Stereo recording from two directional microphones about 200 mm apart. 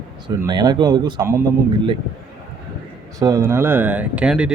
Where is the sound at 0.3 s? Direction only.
20° right (ahead or behind).